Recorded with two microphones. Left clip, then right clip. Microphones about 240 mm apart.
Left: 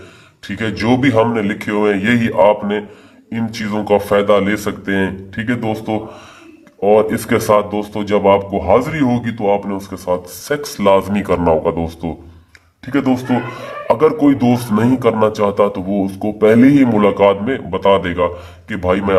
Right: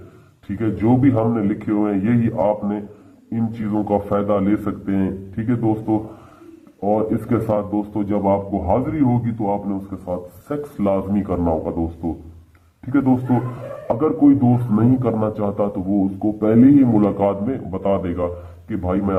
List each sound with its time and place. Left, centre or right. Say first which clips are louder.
0.6 s speech: left 3 dB; left
12.9 s speech: left 2 dB; centre